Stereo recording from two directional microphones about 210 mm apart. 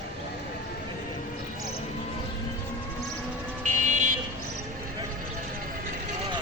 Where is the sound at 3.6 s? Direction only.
35° right (ahead or behind).